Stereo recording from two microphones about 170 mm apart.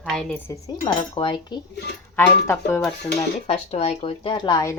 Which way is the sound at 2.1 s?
15° left (ahead or behind).